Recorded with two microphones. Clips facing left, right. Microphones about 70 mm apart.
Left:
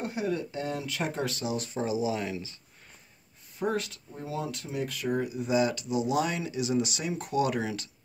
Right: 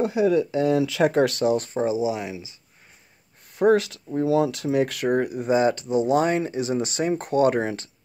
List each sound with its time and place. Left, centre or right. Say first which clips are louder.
0.5 s speech: right 12 dB; right
1.4 s speech: right 11 dB; right
1.8 s speech: right 6 dB; right
3.5 s speech: right 12 dB; right
5.5 s speech: right 6 dB; right